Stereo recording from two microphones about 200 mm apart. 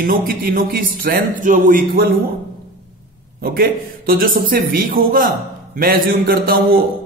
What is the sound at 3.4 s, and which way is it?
Speech, 50° right (ahead or behind).